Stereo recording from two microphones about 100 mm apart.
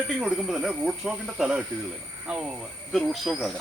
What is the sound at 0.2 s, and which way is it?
Speech, 5° right (ahead or behind).